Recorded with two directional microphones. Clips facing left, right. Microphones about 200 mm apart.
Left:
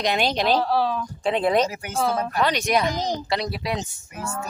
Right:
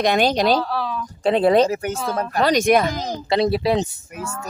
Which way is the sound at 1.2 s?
35° right (ahead or behind).